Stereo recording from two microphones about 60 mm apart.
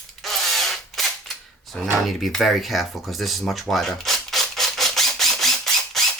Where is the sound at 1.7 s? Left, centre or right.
Centre.